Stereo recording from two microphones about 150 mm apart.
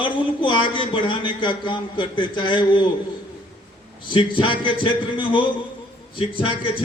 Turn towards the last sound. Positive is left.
turn(degrees=35)  # may be behind; listen again after turning